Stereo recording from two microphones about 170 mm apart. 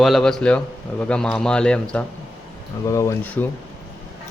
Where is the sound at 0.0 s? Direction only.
Centre (ahead or behind).